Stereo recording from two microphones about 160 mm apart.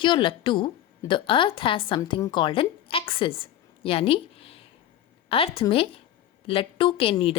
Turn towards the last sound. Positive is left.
turn(degrees=35)  # may be behind; listen again after turning